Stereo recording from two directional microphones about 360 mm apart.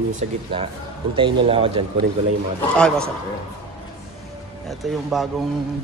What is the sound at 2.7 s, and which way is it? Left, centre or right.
Speech, centre.